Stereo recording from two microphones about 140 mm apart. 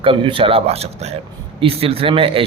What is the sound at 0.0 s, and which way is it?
A man's voice, 40° right (ahead or behind).